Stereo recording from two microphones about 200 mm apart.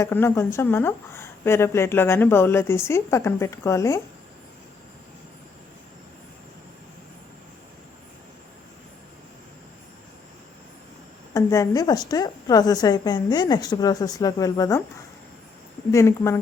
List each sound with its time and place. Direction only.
0.0 s speech: 10° left (ahead or behind)
11.3 s a woman's voice: 15° left (ahead or behind)
15.9 s speech: 15° left (ahead or behind)